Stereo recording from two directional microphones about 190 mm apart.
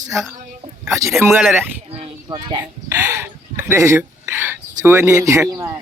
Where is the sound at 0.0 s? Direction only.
15° right (ahead or behind).